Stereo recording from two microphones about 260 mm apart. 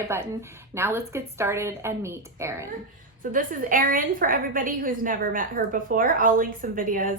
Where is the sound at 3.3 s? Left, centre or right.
Right.